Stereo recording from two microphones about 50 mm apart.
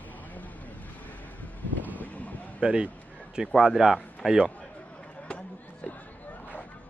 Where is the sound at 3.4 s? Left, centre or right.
Centre.